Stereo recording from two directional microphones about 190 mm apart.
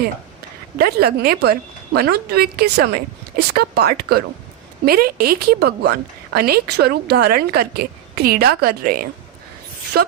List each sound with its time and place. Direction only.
0.8 s a woman's voice: 55° right (ahead or behind)